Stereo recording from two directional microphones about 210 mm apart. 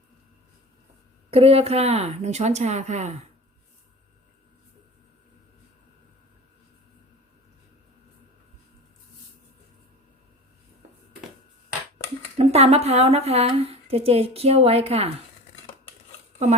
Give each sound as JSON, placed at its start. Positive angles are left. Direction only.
{"t": 1.3, "sound": "speech", "side_deg": -30}
{"t": 12.4, "sound": "a woman's voice", "side_deg": -30}